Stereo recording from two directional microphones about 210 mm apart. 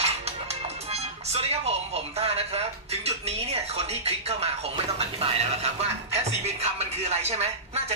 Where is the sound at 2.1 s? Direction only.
30° right (ahead or behind).